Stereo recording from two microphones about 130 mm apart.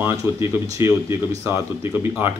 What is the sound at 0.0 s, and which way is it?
Speech, 20° right (ahead or behind).